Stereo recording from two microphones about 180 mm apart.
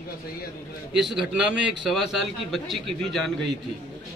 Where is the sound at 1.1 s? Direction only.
5° right (ahead or behind).